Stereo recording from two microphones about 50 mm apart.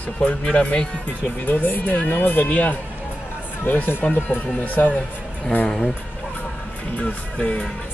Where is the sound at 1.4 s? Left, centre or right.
Left.